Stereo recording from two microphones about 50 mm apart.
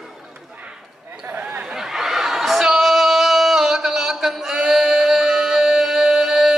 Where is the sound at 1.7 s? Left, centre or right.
Centre.